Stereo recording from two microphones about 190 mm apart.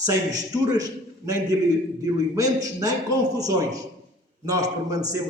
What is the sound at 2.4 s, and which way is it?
A man's voice, 20° right (ahead or behind).